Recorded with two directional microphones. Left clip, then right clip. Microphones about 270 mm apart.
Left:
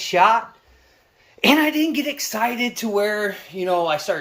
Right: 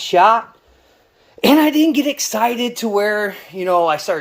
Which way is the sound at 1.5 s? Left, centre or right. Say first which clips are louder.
Right 5 dB; right.